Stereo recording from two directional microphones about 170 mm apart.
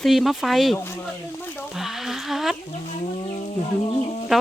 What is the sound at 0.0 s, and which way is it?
Speech, centre (ahead or behind).